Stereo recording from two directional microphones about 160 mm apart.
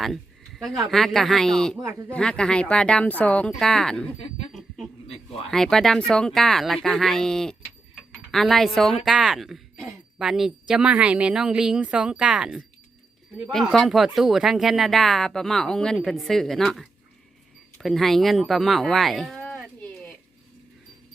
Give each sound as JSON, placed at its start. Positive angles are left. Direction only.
{"t": 0.9, "sound": "speech", "side_deg": 0}
{"t": 1.8, "sound": "speech", "side_deg": -15}
{"t": 2.0, "sound": "speech", "side_deg": 5}
{"t": 5.5, "sound": "speech", "side_deg": 5}